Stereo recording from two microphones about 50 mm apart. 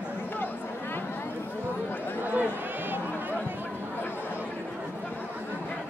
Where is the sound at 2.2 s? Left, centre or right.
Right.